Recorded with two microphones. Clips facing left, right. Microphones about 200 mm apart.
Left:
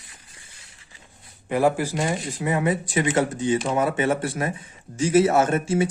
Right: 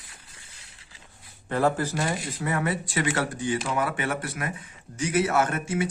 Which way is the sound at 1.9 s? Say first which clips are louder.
Left 3 dB; 25° left (ahead or behind).